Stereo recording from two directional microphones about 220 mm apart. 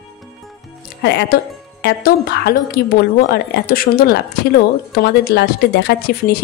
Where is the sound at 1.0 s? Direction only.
50° left (ahead or behind).